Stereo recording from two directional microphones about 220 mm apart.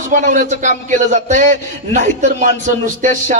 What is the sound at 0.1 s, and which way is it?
A man's voice, 35° right (ahead or behind).